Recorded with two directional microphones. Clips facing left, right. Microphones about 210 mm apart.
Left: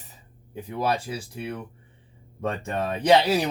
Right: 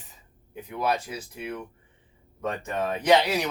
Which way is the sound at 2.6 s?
30° left (ahead or behind).